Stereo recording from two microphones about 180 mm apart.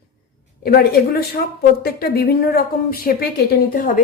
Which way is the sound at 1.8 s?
60° left (ahead or behind).